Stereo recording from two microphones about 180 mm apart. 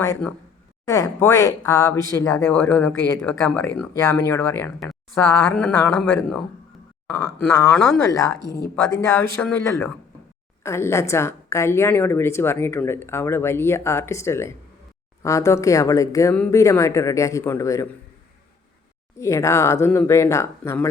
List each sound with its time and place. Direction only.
0.0 s a woman's voice: 10° left (ahead or behind)
3.6 s a woman's voice: 15° left (ahead or behind)
7.7 s a woman's voice: 5° left (ahead or behind)
19.2 s a woman's voice: 15° left (ahead or behind)